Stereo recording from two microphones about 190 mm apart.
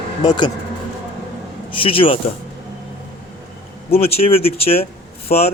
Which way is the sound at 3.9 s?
30° left (ahead or behind).